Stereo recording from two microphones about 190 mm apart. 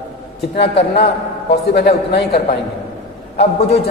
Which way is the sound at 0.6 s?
60° left (ahead or behind).